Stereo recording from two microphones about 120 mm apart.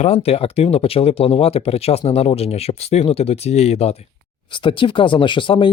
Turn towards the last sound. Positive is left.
turn(degrees=45)  # may be behind; listen again after turning